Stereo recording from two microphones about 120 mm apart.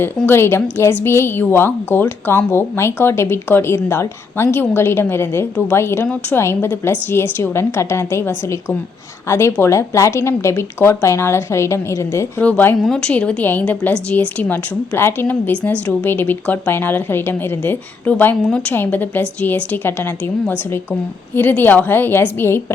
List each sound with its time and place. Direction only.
0.3 s speech: 20° left (ahead or behind)
12.4 s a woman's voice: 15° left (ahead or behind)